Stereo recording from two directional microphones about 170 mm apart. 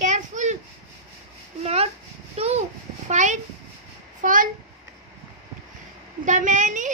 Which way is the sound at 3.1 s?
45° right (ahead or behind).